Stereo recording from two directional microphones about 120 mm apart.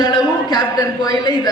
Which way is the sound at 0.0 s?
35° left (ahead or behind).